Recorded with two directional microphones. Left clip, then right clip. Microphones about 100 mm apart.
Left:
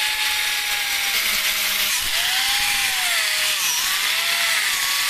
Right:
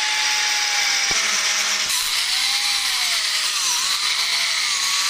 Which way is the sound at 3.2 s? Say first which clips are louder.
Left 1 dB; 25° left (ahead or behind).